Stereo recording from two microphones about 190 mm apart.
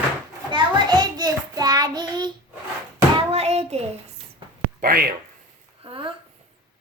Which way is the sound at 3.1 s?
35° right (ahead or behind).